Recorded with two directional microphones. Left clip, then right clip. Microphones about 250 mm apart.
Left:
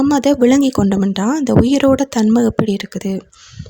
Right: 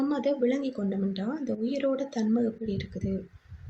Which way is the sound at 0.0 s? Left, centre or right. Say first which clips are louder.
Left 14 dB; left.